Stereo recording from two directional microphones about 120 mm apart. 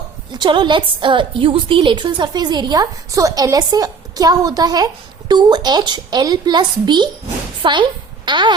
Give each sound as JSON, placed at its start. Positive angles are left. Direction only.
{"t": 0.3, "sound": "a woman's voice", "side_deg": -40}